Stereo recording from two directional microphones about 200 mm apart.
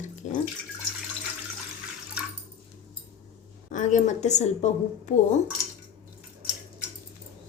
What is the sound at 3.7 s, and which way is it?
A woman's voice, 40° left (ahead or behind).